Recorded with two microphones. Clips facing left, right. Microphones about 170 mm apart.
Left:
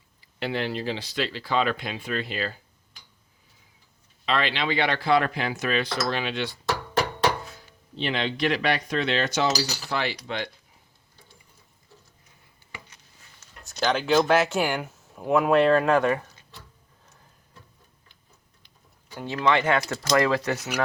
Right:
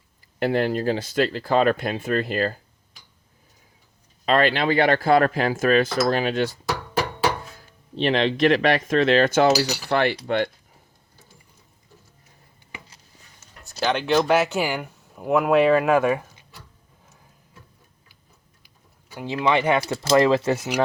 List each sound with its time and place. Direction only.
0.2 s speech: 50° right (ahead or behind)
4.3 s speech: 50° right (ahead or behind)
8.0 s speech: 40° right (ahead or behind); by 9.6 s 55° right (ahead or behind)
9.9 s cutlery: 55° right (ahead or behind)
10.2 s speech: 50° right (ahead or behind)
13.7 s speech: 5° right (ahead or behind)
19.1 s speech: 15° right (ahead or behind)